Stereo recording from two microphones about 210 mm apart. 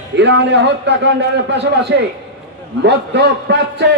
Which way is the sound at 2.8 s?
55° right (ahead or behind).